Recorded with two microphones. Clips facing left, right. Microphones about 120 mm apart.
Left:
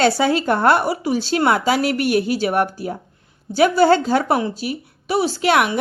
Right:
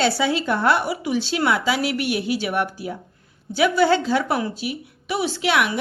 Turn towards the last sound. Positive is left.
turn(degrees=45)  # may be behind; listen again after turning